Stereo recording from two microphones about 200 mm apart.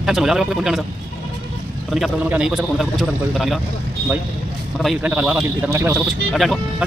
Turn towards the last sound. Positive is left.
turn(degrees=0)  # may be behind; listen again after turning